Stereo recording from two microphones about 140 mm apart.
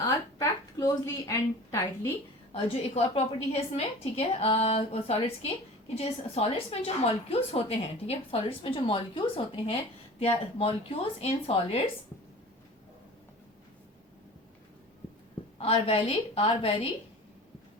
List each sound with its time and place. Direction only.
0.0 s a sound: 25° left (ahead or behind)
2.9 s a woman's voice: 45° left (ahead or behind)
15.5 s a woman's voice: 45° left (ahead or behind)